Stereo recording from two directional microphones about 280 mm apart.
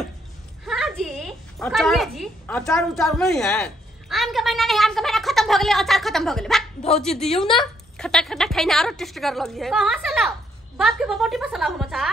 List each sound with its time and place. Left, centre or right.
0.7 s a woman's voice: centre